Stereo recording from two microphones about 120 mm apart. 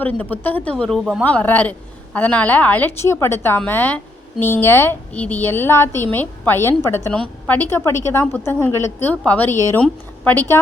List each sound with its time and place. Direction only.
0.0 s a woman's voice: 15° left (ahead or behind)
7.1 s a woman's voice: 10° left (ahead or behind)